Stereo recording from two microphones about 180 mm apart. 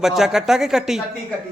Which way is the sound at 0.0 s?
Centre (ahead or behind).